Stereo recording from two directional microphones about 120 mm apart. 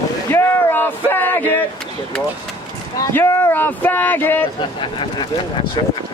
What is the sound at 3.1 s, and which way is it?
Speech, 20° left (ahead or behind).